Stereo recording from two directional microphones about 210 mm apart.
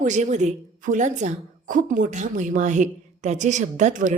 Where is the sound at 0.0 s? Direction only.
35° right (ahead or behind).